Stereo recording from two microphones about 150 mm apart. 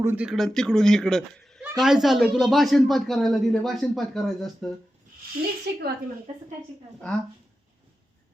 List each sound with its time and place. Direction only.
0.0 s speech: 15° right (ahead or behind)
0.3 s speech: centre (ahead or behind)
5.7 s a woman's voice: 90° right